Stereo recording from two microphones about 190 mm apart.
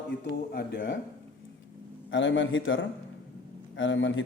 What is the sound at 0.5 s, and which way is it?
Speech, 65° left (ahead or behind).